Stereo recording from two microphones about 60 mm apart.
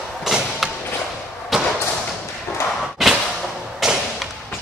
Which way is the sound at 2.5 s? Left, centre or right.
Left.